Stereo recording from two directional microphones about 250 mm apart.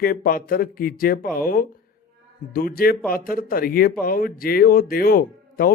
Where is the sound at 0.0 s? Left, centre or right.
Left.